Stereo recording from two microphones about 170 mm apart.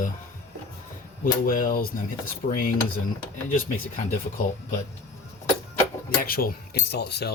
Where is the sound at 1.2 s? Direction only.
55° left (ahead or behind).